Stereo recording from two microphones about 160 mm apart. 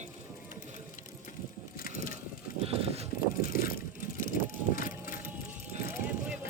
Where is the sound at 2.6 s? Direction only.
40° right (ahead or behind).